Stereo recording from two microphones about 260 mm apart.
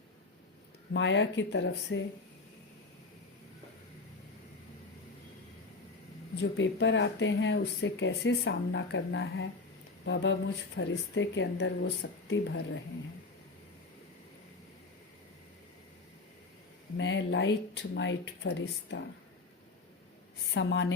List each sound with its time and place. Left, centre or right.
0.9 s speech: left
6.4 s speech: left
17.0 s speech: left
20.5 s speech: left